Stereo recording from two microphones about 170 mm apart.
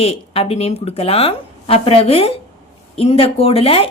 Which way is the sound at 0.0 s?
35° left (ahead or behind).